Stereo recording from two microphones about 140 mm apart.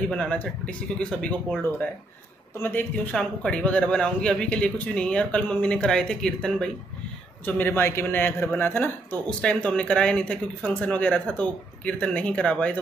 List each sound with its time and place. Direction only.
0.1 s a man's voice: 10° left (ahead or behind)